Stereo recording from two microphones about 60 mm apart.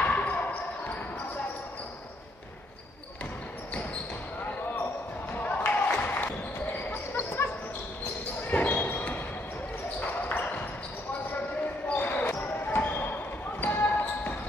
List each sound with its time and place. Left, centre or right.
0.0 s basketball bounce: left
5.4 s a sound: left
8.0 s basketball bounce: left
11.9 s basketball bounce: left